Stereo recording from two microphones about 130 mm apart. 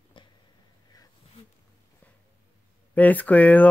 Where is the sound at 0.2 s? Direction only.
40° left (ahead or behind).